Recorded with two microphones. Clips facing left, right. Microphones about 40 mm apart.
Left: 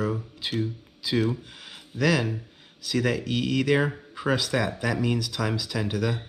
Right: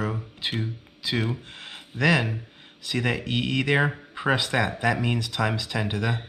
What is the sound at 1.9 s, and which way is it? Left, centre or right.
Speech, right.